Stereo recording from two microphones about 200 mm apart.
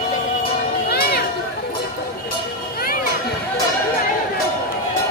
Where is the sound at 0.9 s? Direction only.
50° left (ahead or behind).